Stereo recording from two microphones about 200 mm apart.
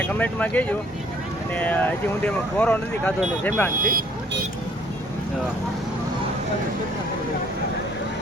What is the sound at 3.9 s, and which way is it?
Vehicle, 45° right (ahead or behind).